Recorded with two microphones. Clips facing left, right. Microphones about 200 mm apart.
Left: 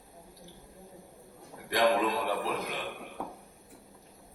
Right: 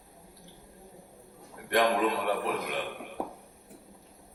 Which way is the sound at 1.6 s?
60° right (ahead or behind).